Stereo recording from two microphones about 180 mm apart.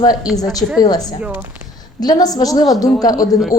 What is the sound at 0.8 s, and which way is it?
A woman's voice, 20° left (ahead or behind).